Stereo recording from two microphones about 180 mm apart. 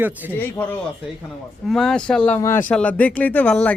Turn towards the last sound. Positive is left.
turn(degrees=10)  # may be behind; listen again after turning